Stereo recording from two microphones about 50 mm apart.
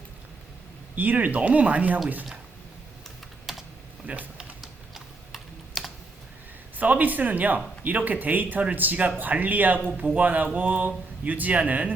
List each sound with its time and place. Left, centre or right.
0.9 s speech: right
3.5 s typing: centre
4.0 s speech: right
4.6 s typing: centre
6.7 s speech: right